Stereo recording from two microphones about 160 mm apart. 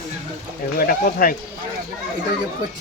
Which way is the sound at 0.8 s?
65° left (ahead or behind).